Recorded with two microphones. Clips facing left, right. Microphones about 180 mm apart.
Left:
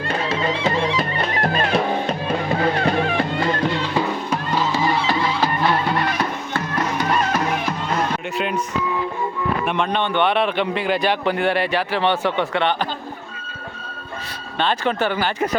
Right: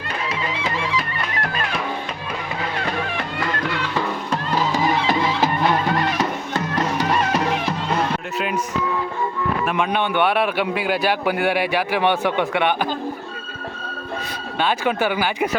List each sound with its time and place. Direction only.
0.3 s music: 30° left (ahead or behind)
4.3 s music: 5° left (ahead or behind)
4.7 s music: 15° right (ahead or behind)
8.4 s music: centre (ahead or behind)
9.6 s a man's voice: 10° right (ahead or behind)
14.6 s a man's voice: 10° right (ahead or behind)